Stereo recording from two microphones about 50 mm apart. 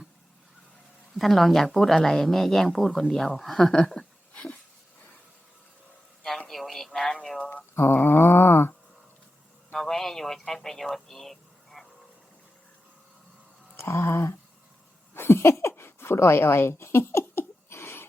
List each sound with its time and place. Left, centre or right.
1.1 s speech: centre
6.5 s speech: centre
8.0 s a sound: left
9.7 s a man's voice: centre
13.7 s speech: left
15.1 s a sound: left